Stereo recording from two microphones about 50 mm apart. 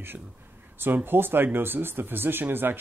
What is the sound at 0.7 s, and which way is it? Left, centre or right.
Speech, right.